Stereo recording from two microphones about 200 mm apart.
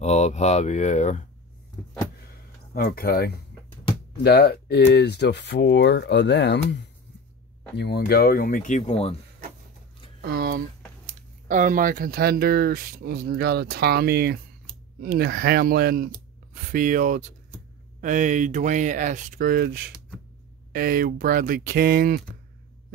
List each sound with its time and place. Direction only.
0.0 s speech: 35° left (ahead or behind)
2.7 s speech: 50° left (ahead or behind); by 9.1 s 35° left (ahead or behind)
10.2 s a sound: 50° right (ahead or behind)
11.4 s speech: 40° right (ahead or behind)